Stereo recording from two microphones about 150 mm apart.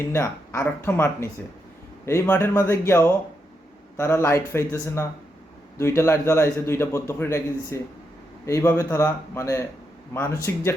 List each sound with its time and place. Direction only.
0.1 s a man's voice: 15° left (ahead or behind)